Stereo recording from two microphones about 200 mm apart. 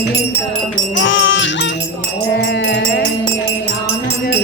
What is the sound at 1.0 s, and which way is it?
Music, 70° left (ahead or behind).